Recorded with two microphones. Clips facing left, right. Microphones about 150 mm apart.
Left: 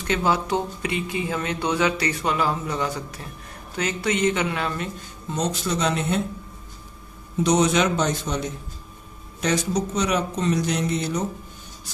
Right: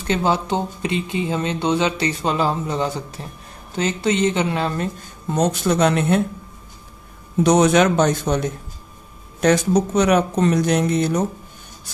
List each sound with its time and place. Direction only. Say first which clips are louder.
0.0 s speech: right 3 dB; 30° right (ahead or behind)
5.3 s speech: right 6 dB; 55° right (ahead or behind)
7.4 s speech: right 5 dB; 55° right (ahead or behind)